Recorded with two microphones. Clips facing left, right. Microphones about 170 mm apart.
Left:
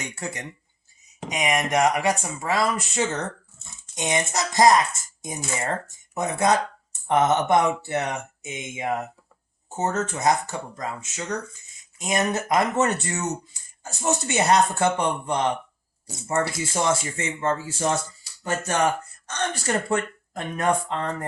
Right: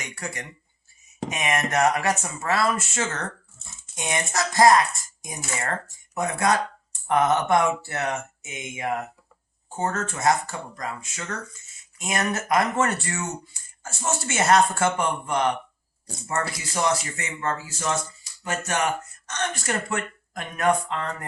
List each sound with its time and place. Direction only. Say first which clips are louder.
0.0 s speech: left 2 dB; 25° left (ahead or behind)
6.1 s speech: left 1 dB; 20° left (ahead or behind)